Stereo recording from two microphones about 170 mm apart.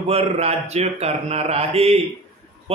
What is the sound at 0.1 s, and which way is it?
A man's voice, 35° right (ahead or behind).